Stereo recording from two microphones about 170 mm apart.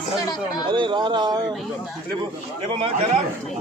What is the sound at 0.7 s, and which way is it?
Speech, 30° right (ahead or behind).